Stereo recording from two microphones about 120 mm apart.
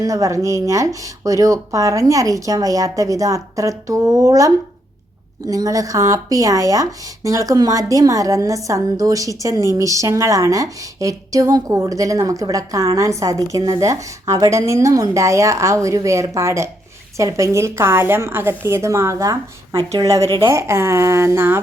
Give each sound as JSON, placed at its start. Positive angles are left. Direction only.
{"t": 0.0, "sound": "a woman's voice", "side_deg": -30}